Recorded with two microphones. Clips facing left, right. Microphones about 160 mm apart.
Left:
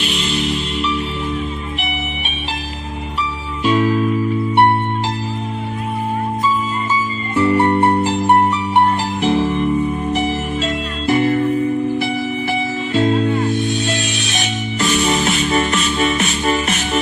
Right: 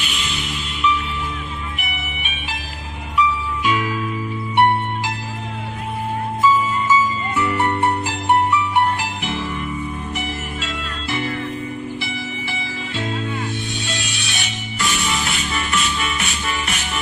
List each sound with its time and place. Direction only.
0.1 s music: 40° left (ahead or behind)
3.6 s music: 35° left (ahead or behind)
7.3 s music: 30° left (ahead or behind)
10.6 s music: 45° left (ahead or behind)
12.9 s music: 40° left (ahead or behind)